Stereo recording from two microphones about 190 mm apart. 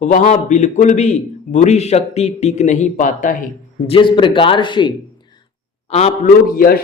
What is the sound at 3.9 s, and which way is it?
A man's voice, 25° left (ahead or behind).